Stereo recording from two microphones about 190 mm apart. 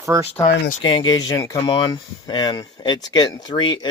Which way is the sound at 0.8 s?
25° left (ahead or behind).